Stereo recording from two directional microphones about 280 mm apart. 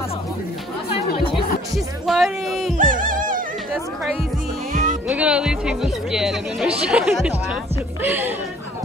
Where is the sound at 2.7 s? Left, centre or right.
Right.